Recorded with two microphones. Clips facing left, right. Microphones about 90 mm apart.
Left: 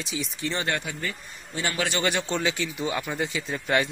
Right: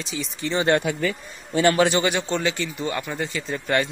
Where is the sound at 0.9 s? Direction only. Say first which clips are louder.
Right 10 dB; 90° right.